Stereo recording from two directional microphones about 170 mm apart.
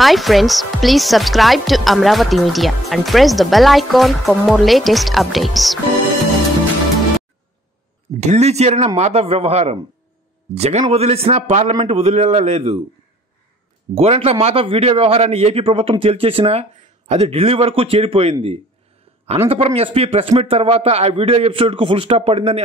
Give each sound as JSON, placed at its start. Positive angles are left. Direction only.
{"t": 0.0, "sound": "speech", "side_deg": 0}
{"t": 8.2, "sound": "a man's voice", "side_deg": -40}
{"t": 13.9, "sound": "a man's voice", "side_deg": -35}